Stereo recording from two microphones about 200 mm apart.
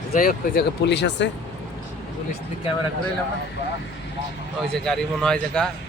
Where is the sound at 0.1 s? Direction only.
50° left (ahead or behind).